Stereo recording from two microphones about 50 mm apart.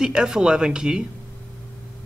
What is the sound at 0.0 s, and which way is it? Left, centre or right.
Speech, centre.